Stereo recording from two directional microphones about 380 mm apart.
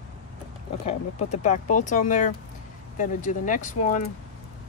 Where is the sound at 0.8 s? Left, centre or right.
Centre.